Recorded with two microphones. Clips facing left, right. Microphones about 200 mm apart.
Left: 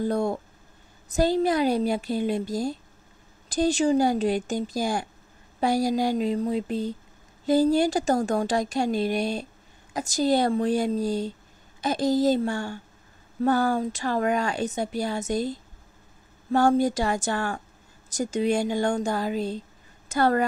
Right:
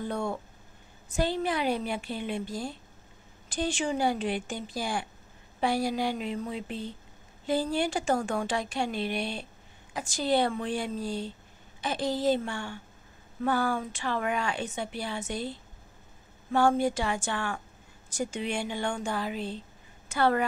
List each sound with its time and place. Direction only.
0.0 s a woman's voice: 40° left (ahead or behind)